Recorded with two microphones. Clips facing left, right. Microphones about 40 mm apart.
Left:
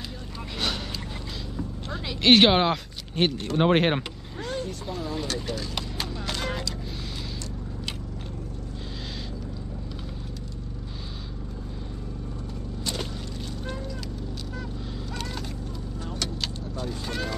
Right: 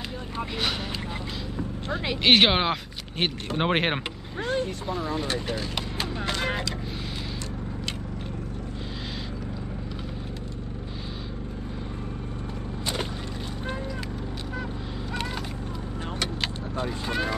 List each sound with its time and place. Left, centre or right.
1.6 s a sound: right
2.2 s speech: centre
4.5 s a sound: right
4.8 s speech: centre
5.8 s clip-clop: centre
16.2 s vehicle: right